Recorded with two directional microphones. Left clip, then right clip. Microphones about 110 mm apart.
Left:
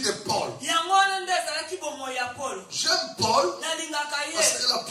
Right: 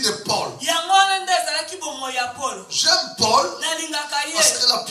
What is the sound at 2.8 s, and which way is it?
Speech, 25° right (ahead or behind).